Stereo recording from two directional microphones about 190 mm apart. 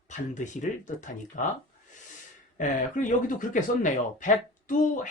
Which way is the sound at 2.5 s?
45° left (ahead or behind).